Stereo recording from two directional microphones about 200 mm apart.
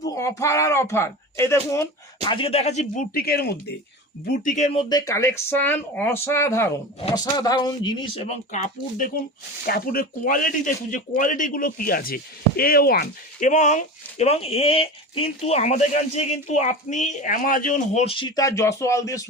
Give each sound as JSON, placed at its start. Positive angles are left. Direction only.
{"t": 0.0, "sound": "speech", "side_deg": 15}
{"t": 2.3, "sound": "speech", "side_deg": 30}
{"t": 4.3, "sound": "speech", "side_deg": 40}